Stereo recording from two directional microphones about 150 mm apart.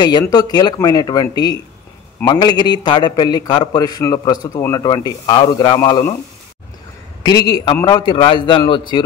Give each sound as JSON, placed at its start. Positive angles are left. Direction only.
{"t": 0.3, "sound": "a man's voice", "side_deg": 25}
{"t": 7.2, "sound": "a man's voice", "side_deg": 25}